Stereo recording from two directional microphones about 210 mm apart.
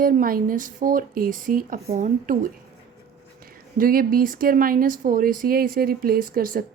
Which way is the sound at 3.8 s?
45° right (ahead or behind).